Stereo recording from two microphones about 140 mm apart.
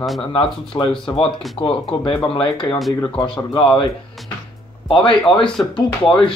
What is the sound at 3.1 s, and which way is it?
Speech, 35° left (ahead or behind).